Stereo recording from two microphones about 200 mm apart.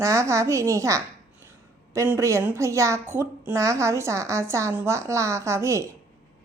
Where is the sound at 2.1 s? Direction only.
15° right (ahead or behind).